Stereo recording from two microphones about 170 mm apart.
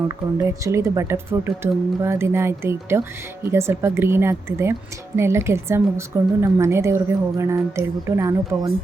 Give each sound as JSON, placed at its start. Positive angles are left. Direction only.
{"t": 0.4, "sound": "a woman's voice", "side_deg": -20}